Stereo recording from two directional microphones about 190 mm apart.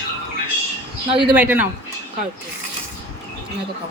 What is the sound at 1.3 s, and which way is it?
Speech, 10° right (ahead or behind).